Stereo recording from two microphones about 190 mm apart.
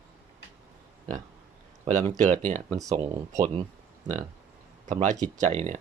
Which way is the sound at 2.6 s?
15° right (ahead or behind).